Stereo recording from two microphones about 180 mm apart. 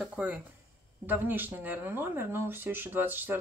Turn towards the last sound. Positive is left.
turn(degrees=-10)  # may be behind; listen again after turning